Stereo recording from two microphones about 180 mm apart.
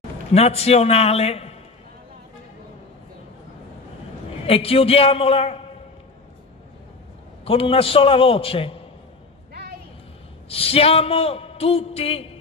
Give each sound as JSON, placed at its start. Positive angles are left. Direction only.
{"t": 0.3, "sound": "a man's voice", "side_deg": 35}
{"t": 4.5, "sound": "a man's voice", "side_deg": 30}
{"t": 7.4, "sound": "a man's voice", "side_deg": 30}
{"t": 10.5, "sound": "a man's voice", "side_deg": 30}